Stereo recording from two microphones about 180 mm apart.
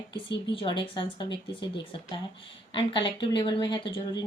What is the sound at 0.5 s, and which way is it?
Speech, 30° left (ahead or behind).